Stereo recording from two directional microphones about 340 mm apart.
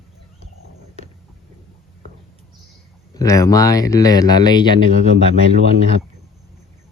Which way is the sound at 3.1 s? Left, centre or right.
Centre.